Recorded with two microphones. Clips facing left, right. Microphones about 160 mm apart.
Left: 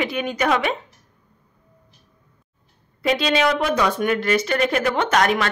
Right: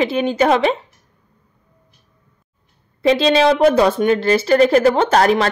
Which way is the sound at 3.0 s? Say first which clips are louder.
Right 6 dB; 30° right (ahead or behind).